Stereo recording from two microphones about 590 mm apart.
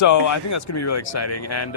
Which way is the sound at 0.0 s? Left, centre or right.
Left.